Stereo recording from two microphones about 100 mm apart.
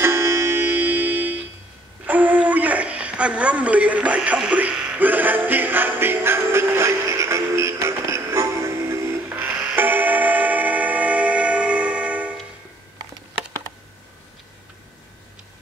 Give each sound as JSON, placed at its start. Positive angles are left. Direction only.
{"t": 0.0, "sound": "music", "side_deg": -25}
{"t": 2.0, "sound": "a sound", "side_deg": -15}
{"t": 9.8, "sound": "music", "side_deg": -20}